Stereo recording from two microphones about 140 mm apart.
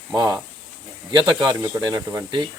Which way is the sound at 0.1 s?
30° right (ahead or behind).